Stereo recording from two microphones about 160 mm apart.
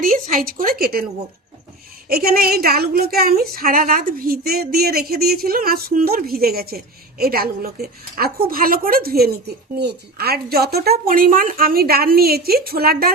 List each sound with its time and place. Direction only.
0.0 s speech: 60° right (ahead or behind)
2.0 s a woman's voice: 70° right (ahead or behind)